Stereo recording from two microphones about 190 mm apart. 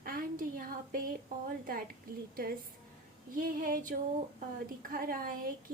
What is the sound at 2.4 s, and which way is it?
Speech, 50° right (ahead or behind).